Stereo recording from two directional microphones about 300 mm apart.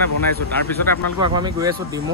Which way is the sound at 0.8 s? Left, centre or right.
Left.